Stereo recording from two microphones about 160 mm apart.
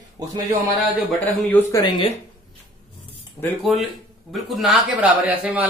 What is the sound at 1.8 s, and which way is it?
Speech, 30° left (ahead or behind).